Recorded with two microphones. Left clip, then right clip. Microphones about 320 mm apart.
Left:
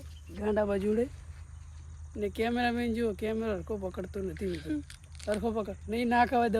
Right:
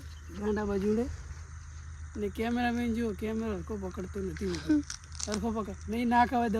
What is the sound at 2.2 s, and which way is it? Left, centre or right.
Speech, centre.